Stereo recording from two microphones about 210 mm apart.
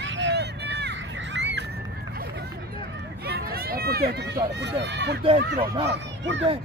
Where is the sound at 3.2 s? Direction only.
50° right (ahead or behind).